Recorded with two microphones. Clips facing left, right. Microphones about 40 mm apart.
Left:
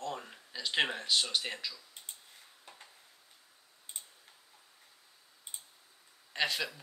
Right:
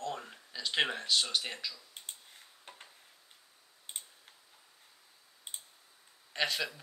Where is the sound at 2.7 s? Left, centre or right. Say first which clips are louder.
Right 2 dB; right.